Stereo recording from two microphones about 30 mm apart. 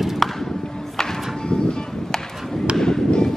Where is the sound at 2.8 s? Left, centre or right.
Left.